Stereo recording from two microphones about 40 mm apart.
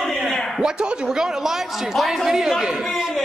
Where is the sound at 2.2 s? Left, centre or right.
Centre.